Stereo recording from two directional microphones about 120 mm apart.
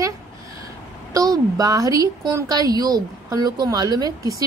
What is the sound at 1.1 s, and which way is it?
A woman's voice, 30° right (ahead or behind).